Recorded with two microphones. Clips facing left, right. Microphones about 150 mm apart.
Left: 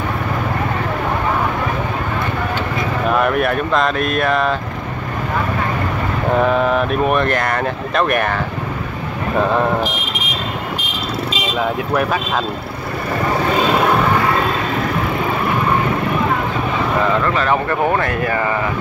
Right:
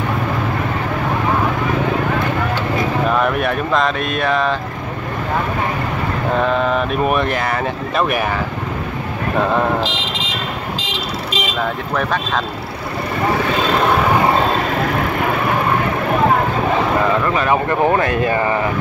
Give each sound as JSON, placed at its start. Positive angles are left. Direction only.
{"t": 3.1, "sound": "speech", "side_deg": 0}
{"t": 6.4, "sound": "speech", "side_deg": 5}
{"t": 9.8, "sound": "vehicle", "side_deg": -90}
{"t": 11.9, "sound": "speech", "side_deg": 5}
{"t": 17.0, "sound": "speech", "side_deg": -15}